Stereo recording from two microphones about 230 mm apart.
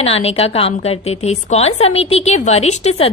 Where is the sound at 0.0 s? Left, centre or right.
Left.